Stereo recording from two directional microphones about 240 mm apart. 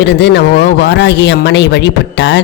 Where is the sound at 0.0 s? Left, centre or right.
Left.